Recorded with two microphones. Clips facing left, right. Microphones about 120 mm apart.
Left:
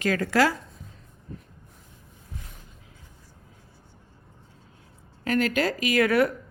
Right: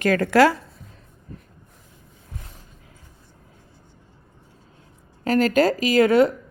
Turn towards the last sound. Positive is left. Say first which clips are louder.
# right 5 dB
turn(degrees=-25)  # may be behind; listen again after turning